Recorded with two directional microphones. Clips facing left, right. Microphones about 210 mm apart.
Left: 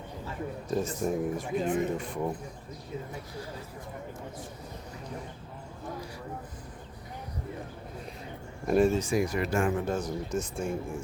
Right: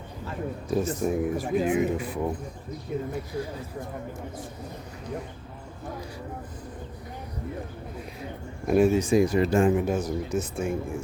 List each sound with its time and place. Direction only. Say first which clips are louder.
0.7 s speech: right 4 dB; 5° right (ahead or behind)
8.6 s speech: right 3 dB; 5° right (ahead or behind)
9.0 s speech: right 7 dB; 25° right (ahead or behind)
9.8 s speech: right 4 dB; 10° right (ahead or behind)